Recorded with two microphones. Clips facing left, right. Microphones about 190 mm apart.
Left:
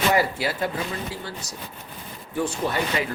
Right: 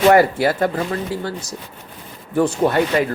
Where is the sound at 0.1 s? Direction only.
55° right (ahead or behind).